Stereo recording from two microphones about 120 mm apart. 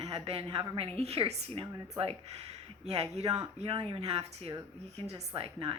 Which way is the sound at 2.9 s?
55° right (ahead or behind).